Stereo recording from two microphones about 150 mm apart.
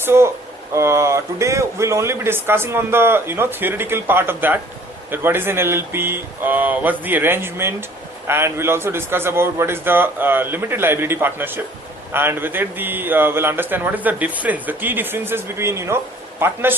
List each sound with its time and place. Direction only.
0.0 s a man's voice: 15° right (ahead or behind)